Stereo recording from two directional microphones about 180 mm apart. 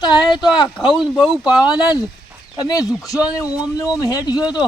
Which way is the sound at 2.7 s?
20° left (ahead or behind).